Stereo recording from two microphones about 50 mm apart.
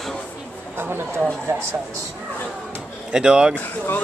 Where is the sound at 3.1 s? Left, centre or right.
Centre.